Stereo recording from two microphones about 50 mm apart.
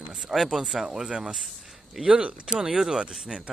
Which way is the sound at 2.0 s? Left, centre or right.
Right.